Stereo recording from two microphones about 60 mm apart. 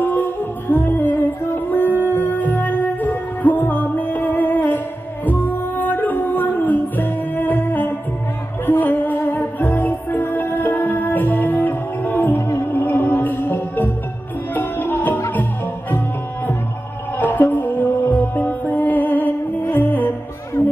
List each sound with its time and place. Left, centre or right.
0.0 s music: left
12.4 s music: left
12.6 s music: left
17.2 s music: left